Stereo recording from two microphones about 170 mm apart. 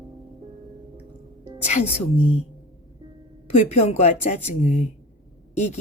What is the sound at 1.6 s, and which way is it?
Speech, 40° left (ahead or behind).